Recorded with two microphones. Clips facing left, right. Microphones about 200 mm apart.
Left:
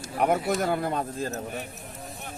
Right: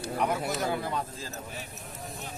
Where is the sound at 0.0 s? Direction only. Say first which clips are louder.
Left 4 dB; 55° left (ahead or behind).